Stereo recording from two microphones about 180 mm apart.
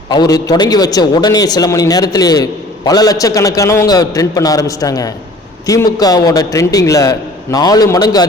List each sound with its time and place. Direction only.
0.1 s a man's voice: 20° left (ahead or behind)